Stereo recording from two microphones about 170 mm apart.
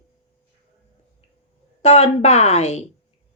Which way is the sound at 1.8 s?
35° left (ahead or behind).